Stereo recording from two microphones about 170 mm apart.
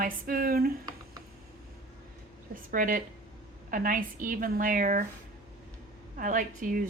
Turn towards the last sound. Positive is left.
turn(degrees=-50)  # may be behind; listen again after turning